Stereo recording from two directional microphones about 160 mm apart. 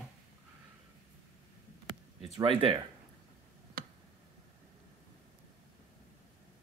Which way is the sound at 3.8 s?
65° right (ahead or behind).